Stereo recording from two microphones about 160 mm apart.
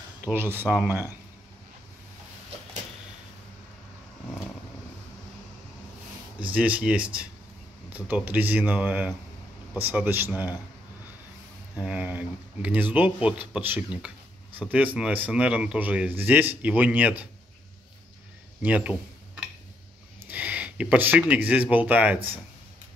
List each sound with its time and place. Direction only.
0.2 s speech: 15° right (ahead or behind)
6.5 s speech: 10° right (ahead or behind)
11.8 s speech: 10° right (ahead or behind)
18.6 s speech: 10° right (ahead or behind)
20.2 s speech: 10° right (ahead or behind)